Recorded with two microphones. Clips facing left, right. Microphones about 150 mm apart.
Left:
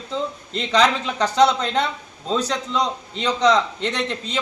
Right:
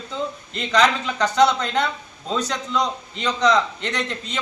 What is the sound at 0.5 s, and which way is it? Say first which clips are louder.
A man's voice: left 1 dB; 30° left (ahead or behind).